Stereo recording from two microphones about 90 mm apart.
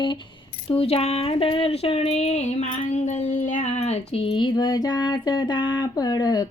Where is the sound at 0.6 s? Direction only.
90° left.